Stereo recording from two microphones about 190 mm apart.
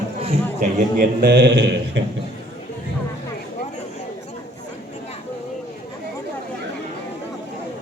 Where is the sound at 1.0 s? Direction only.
55° right (ahead or behind).